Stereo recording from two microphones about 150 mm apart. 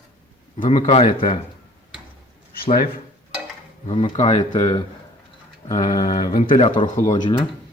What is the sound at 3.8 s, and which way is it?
Speech, 40° left (ahead or behind).